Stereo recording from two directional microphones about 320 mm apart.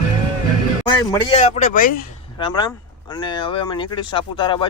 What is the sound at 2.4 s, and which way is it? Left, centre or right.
Speech, centre.